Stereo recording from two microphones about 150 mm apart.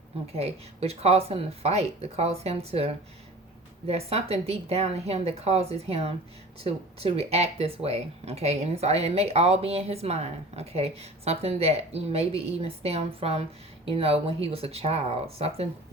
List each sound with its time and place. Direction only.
0.3 s speech: 45° right (ahead or behind)